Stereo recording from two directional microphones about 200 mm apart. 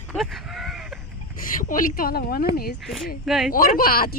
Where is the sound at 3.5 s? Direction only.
45° left (ahead or behind).